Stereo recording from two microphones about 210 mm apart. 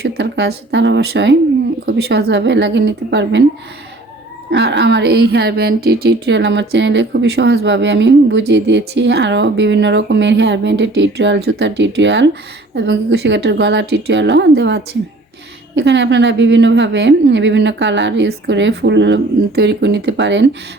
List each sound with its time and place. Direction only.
0.0 s a woman's voice: 55° right (ahead or behind)
4.5 s a woman's voice: 55° right (ahead or behind)